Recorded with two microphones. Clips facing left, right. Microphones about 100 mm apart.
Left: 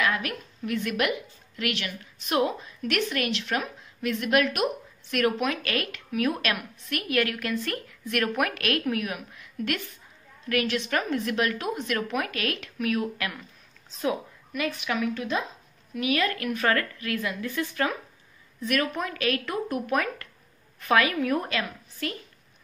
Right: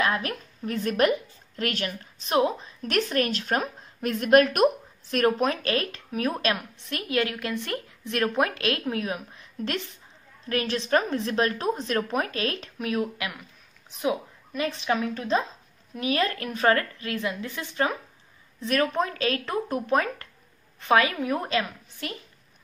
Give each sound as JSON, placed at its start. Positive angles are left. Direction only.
{"t": 0.0, "sound": "a woman's voice", "side_deg": -35}
{"t": 14.5, "sound": "a woman's voice", "side_deg": -30}